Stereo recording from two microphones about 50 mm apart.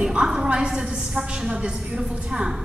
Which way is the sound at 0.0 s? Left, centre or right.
Centre.